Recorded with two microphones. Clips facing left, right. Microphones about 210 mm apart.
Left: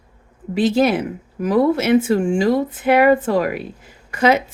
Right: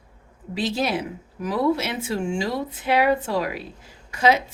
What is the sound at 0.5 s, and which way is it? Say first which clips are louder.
Speech: left 8 dB; 50° left (ahead or behind).